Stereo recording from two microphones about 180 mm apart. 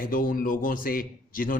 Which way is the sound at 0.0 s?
50° left (ahead or behind).